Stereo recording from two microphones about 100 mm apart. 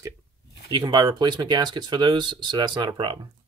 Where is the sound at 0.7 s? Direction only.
50° right (ahead or behind).